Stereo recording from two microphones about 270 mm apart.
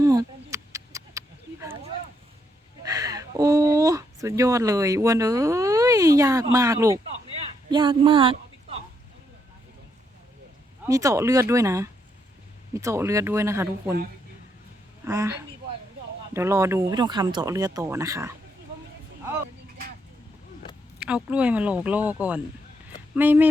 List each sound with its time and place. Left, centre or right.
0.0 s a sound: centre
2.8 s a woman's voice: centre
10.8 s speech: centre
15.0 s speech: centre
21.0 s speech: centre